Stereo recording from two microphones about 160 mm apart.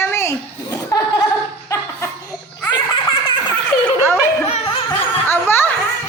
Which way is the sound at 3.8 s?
10° left (ahead or behind).